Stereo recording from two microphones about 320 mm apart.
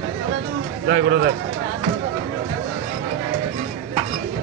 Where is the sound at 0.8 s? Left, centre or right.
Right.